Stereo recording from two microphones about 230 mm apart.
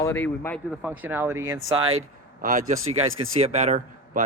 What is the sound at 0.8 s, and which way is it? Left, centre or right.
Speech, centre.